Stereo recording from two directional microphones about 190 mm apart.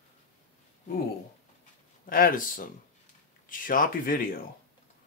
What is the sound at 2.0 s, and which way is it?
Speech, 50° left (ahead or behind).